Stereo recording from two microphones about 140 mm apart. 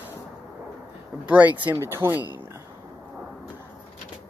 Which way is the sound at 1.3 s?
10° right (ahead or behind).